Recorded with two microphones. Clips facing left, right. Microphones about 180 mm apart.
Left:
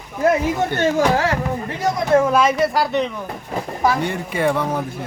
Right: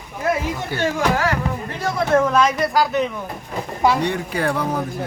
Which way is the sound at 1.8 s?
20° left (ahead or behind).